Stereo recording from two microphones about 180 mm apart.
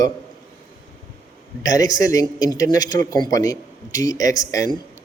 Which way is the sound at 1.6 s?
20° left (ahead or behind).